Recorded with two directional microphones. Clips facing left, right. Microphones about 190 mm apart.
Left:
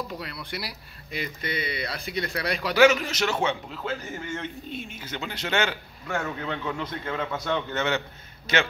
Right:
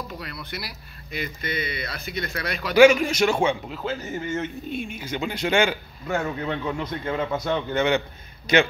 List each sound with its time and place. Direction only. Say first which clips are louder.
0.2 s speech: even; 30° left (ahead or behind)
2.7 s speech: right 5 dB; 10° right (ahead or behind)